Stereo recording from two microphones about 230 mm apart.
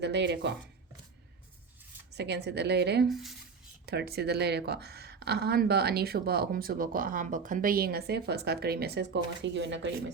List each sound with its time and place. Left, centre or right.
0.0 s speech: right
2.1 s speech: right
3.1 s speech: centre
3.8 s speech: right